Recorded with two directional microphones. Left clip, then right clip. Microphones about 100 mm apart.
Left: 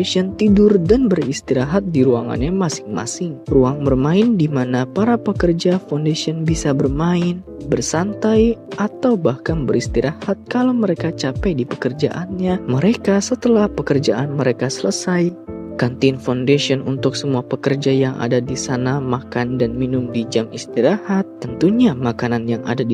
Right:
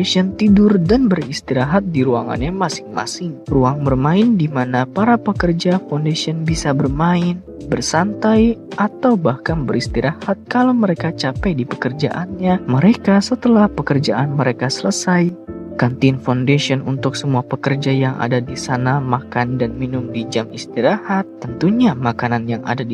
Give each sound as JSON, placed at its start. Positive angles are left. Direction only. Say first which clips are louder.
{"t": 0.0, "sound": "speech", "louder": "even", "side_deg": 20}